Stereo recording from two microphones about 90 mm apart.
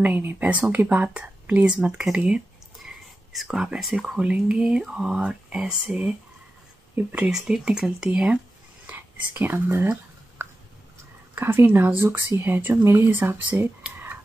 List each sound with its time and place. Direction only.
0.0 s speech: 25° right (ahead or behind)
7.2 s speech: 5° right (ahead or behind)
8.8 s speech: 20° right (ahead or behind)
11.3 s speech: 25° right (ahead or behind)